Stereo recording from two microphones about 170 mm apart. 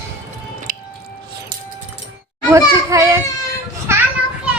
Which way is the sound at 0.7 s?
55° right (ahead or behind).